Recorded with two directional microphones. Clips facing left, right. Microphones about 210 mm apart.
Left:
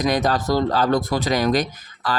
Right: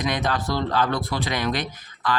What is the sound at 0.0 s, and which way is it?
Speech, 40° left (ahead or behind).